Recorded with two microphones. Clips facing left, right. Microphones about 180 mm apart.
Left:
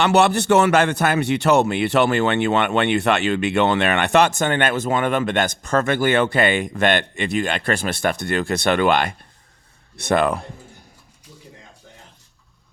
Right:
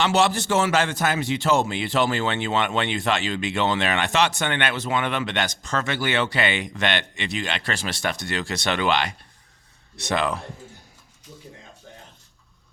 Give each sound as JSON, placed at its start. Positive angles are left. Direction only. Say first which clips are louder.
{"t": 0.0, "sound": "a man's voice", "louder": "left 4 dB", "side_deg": 60}